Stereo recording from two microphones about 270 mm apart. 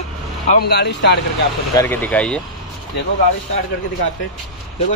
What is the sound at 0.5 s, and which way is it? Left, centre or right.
Speech, left.